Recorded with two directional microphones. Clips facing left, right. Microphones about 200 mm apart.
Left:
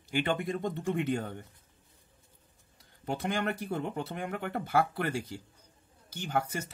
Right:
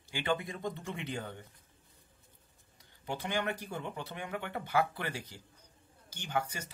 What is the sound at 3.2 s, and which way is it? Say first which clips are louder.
Speech: left 3 dB; 50° left (ahead or behind).